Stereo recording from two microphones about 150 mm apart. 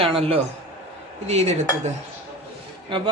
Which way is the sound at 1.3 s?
45° right (ahead or behind).